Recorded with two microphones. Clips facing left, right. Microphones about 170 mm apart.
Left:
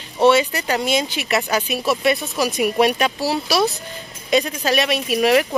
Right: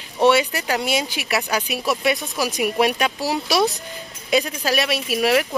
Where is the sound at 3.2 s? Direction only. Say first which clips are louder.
Even; 15° right (ahead or behind).